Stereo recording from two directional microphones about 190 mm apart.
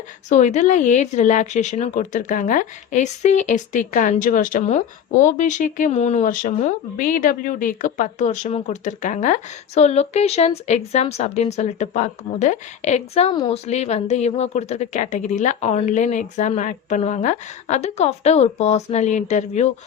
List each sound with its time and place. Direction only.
0.3 s speech: 40° left (ahead or behind)